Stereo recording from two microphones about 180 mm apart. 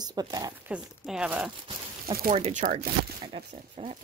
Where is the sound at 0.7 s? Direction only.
10° right (ahead or behind).